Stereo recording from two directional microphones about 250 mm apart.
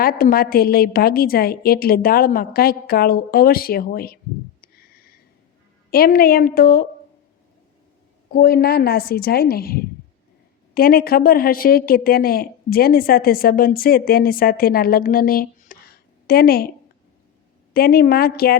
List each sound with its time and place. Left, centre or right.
0.0 s a woman's voice: left
5.9 s a woman's voice: left
8.3 s a woman's voice: left
10.8 s a woman's voice: left
17.7 s a woman's voice: left